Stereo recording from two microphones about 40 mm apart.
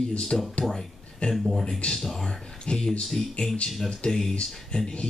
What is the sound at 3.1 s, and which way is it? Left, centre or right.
Speech, centre.